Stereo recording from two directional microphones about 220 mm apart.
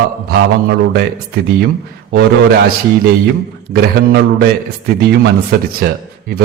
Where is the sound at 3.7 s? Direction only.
45° right (ahead or behind).